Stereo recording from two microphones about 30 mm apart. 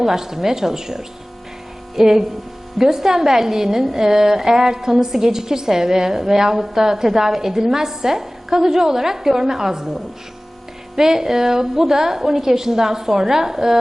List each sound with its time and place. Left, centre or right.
0.0 s a woman's voice: centre